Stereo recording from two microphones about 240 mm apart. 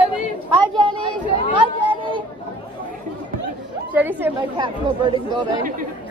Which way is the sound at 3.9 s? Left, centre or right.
Centre.